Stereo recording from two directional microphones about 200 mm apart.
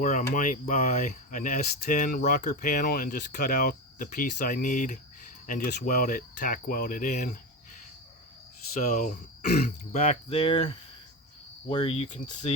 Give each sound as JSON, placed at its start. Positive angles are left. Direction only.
{"t": 0.0, "sound": "speech", "side_deg": 40}
{"t": 8.9, "sound": "speech", "side_deg": 40}
{"t": 11.7, "sound": "cricket", "side_deg": 25}
{"t": 12.4, "sound": "speech", "side_deg": 30}